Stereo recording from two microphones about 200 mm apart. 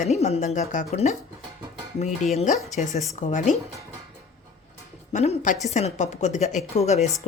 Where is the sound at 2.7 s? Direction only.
35° left (ahead or behind).